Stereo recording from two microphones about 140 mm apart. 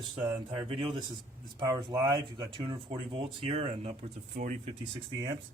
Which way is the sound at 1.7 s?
30° right (ahead or behind).